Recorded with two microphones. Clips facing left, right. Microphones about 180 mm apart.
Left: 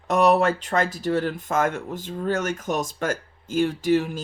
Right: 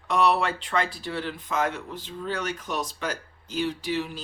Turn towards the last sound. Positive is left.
turn(degrees=50)  # may be behind; listen again after turning